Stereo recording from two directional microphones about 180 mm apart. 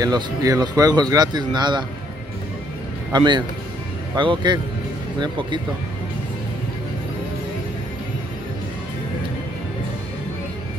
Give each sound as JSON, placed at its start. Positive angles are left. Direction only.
{"t": 0.0, "sound": "speech", "side_deg": -20}
{"t": 3.1, "sound": "speech", "side_deg": -25}